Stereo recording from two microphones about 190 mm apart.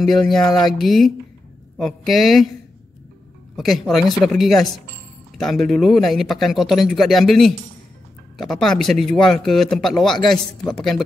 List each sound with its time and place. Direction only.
0.0 s speech: centre (ahead or behind)
3.5 s speech: centre (ahead or behind)